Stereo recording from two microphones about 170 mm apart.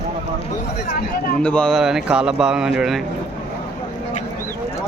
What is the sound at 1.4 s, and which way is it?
Speech, 5° left (ahead or behind).